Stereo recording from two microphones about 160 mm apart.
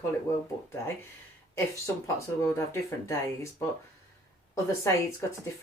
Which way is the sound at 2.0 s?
20° left (ahead or behind).